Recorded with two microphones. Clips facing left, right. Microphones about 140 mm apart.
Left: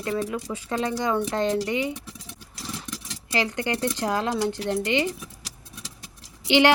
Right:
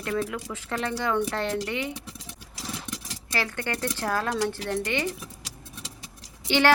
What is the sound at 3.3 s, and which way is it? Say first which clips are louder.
A woman's voice: left 4 dB; 15° left (ahead or behind).